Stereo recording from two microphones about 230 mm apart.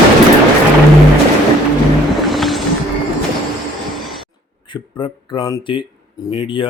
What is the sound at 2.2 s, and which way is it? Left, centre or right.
Music, centre.